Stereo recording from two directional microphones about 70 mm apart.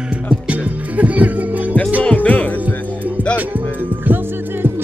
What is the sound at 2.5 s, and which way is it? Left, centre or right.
Music, right.